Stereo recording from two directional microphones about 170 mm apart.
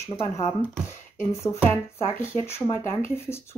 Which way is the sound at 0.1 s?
15° left (ahead or behind).